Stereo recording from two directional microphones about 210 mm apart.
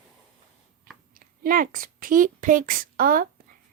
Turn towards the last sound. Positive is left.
turn(degrees=-40)  # may be behind; listen again after turning